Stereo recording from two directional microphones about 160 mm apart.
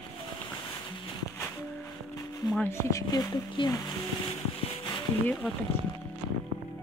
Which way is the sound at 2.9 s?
20° left (ahead or behind).